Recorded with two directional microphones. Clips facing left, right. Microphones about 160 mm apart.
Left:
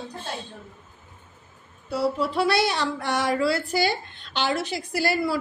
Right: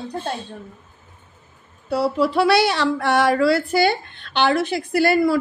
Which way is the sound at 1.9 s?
70° right (ahead or behind).